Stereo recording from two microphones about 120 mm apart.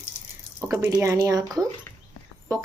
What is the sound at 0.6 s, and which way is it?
A woman's voice, 20° right (ahead or behind).